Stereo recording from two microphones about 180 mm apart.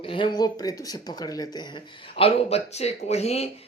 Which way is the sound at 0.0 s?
30° left (ahead or behind).